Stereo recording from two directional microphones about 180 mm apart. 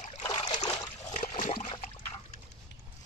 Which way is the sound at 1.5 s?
25° left (ahead or behind).